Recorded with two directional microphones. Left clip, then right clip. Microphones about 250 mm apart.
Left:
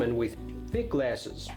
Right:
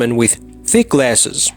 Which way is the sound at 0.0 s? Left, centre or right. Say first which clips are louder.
Right 13 dB; right.